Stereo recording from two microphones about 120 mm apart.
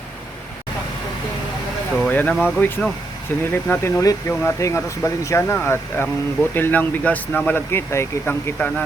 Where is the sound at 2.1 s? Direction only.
10° left (ahead or behind).